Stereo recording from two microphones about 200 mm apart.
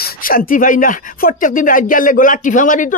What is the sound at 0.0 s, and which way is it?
Speech, 45° left (ahead or behind).